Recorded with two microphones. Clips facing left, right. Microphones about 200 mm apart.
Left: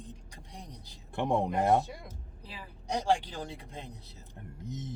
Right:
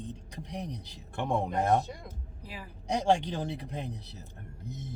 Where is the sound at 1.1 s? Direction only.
15° left (ahead or behind).